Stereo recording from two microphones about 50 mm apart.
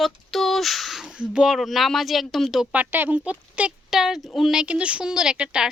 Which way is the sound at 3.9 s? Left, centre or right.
Centre.